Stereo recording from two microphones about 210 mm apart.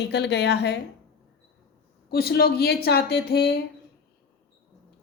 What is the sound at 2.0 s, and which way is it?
A woman's voice, 50° left (ahead or behind).